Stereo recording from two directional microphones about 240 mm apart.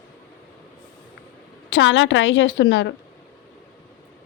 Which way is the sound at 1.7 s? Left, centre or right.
Left.